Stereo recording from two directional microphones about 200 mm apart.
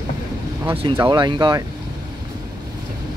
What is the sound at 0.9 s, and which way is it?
Speech, 15° right (ahead or behind).